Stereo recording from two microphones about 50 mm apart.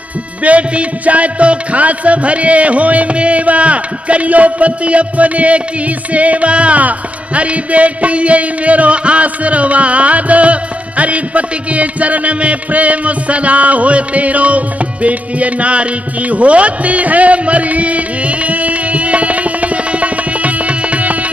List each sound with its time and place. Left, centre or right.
0.4 s music: right